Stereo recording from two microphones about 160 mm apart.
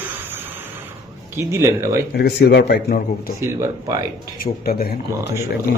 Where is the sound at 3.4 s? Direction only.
15° right (ahead or behind).